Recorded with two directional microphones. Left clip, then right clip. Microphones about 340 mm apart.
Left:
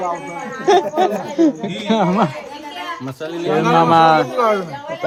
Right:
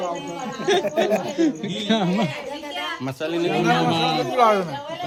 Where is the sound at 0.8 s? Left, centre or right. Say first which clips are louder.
Left 5 dB; centre.